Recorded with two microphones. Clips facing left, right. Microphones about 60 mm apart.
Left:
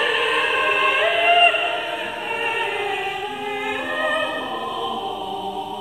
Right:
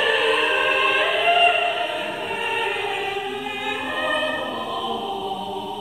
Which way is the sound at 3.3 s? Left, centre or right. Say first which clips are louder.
Left 2 dB; left.